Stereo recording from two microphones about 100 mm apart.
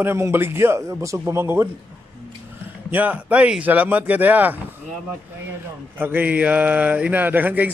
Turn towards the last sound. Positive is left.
turn(degrees=-15)  # may be behind; listen again after turning